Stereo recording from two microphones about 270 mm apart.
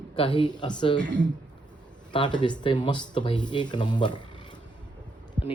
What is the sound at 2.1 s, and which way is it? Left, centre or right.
Speech, centre.